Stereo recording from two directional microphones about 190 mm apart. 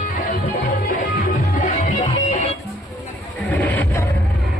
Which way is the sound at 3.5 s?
10° left (ahead or behind).